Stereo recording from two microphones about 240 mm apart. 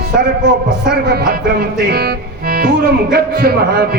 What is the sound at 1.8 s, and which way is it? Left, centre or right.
Music, right.